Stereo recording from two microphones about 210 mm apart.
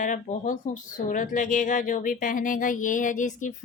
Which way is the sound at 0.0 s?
35° left (ahead or behind).